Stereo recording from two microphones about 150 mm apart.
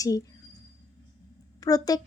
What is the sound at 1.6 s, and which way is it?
Speech, 25° left (ahead or behind).